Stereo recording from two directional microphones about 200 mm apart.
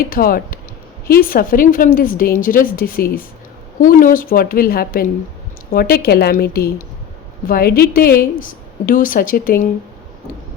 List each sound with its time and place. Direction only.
0.1 s a woman's voice: 45° left (ahead or behind)